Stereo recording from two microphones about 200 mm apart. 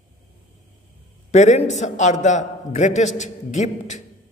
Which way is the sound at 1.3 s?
35° left (ahead or behind).